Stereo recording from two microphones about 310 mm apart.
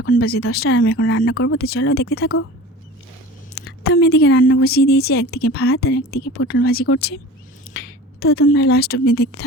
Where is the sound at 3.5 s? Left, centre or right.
Left.